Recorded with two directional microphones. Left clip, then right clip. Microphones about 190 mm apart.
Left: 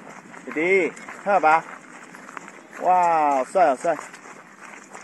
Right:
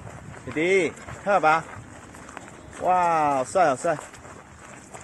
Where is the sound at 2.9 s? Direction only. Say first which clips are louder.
Left 3 dB; 20° left (ahead or behind).